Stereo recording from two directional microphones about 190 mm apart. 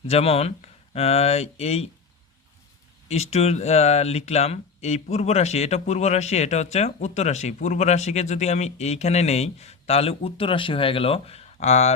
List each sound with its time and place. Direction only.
0.1 s speech: 30° left (ahead or behind)
3.1 s speech: 35° left (ahead or behind)